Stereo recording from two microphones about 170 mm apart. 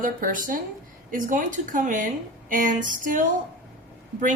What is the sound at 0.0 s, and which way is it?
A woman's voice, 50° right (ahead or behind).